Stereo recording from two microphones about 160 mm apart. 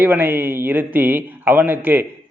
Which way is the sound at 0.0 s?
15° right (ahead or behind).